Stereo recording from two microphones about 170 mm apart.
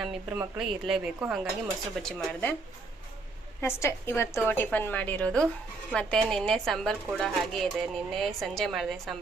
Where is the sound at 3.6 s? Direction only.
15° left (ahead or behind); by 9.1 s centre (ahead or behind).